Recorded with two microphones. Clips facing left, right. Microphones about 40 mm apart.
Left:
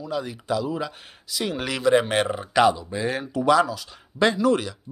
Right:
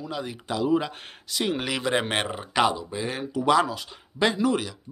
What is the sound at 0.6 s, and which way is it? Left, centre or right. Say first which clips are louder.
Speech: right 4 dB; right.